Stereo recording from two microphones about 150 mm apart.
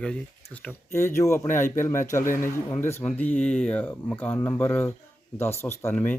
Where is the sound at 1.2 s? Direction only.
20° left (ahead or behind).